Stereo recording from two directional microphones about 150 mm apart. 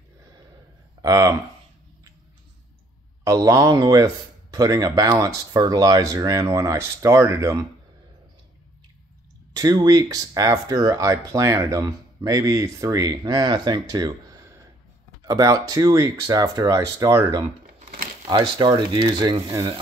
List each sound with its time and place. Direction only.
1.0 s speech: 25° right (ahead or behind)
3.3 s speech: 25° right (ahead or behind)
9.5 s speech: 25° right (ahead or behind)
17.7 s crumpling: 75° right (ahead or behind)
18.2 s speech: 35° right (ahead or behind)